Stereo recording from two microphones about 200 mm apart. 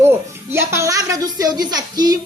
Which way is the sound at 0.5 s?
15° right (ahead or behind).